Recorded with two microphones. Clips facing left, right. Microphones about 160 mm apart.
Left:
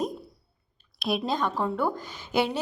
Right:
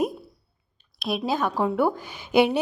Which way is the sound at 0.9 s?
Centre (ahead or behind).